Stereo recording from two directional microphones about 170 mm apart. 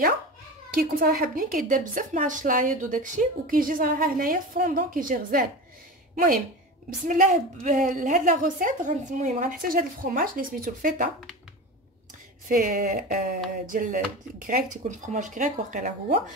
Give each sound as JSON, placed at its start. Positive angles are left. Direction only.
{"t": 0.7, "sound": "a woman's voice", "side_deg": -60}
{"t": 7.1, "sound": "a woman's voice", "side_deg": -50}
{"t": 12.4, "sound": "a woman's voice", "side_deg": -55}